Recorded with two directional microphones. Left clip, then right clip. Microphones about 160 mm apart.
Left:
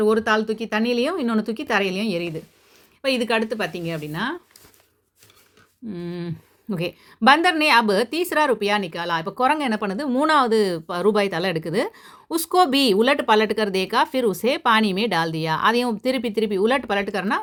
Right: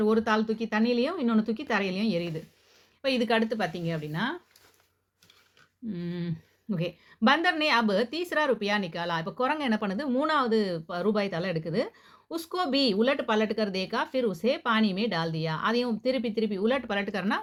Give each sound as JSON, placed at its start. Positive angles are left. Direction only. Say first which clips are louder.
{"t": 0.0, "sound": "speech", "louder": "left 6 dB", "side_deg": 30}
{"t": 5.9, "sound": "speech", "louder": "left 5 dB", "side_deg": 20}
{"t": 6.7, "sound": "a woman's voice", "louder": "left 6 dB", "side_deg": 30}